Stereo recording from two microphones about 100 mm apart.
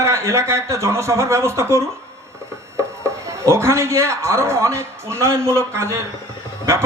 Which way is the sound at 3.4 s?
30° right (ahead or behind).